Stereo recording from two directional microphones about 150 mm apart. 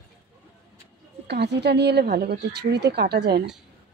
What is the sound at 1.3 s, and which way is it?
Speech, 90° right.